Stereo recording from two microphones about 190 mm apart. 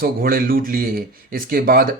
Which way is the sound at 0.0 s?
50° right (ahead or behind).